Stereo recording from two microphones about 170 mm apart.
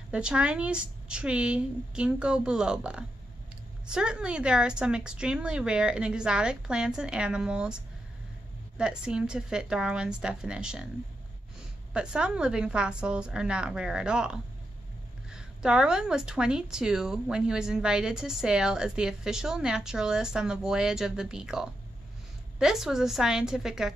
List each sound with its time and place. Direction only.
0.1 s speech: 5° right (ahead or behind)
11.9 s speech: 5° right (ahead or behind)